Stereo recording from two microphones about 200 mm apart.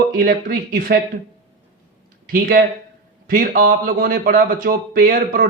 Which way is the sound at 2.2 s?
45° right (ahead or behind).